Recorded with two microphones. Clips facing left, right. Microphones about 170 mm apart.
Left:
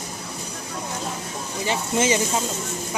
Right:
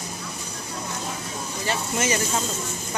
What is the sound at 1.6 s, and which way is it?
Speech, 20° left (ahead or behind).